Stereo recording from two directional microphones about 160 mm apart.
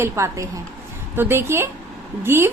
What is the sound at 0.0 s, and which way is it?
A woman's voice, 20° right (ahead or behind).